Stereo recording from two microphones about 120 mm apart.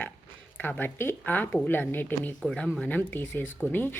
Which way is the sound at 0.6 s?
15° left (ahead or behind).